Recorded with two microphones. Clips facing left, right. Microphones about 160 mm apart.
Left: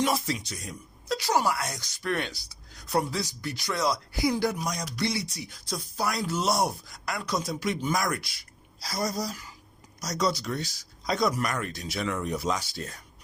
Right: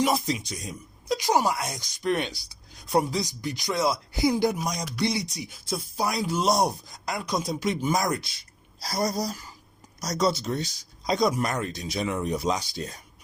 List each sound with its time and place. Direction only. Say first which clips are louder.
0.0 s speech: right 2 dB; 15° right (ahead or behind)
8.8 s speech: right 3 dB; 35° right (ahead or behind); by 13.0 s 20° right (ahead or behind)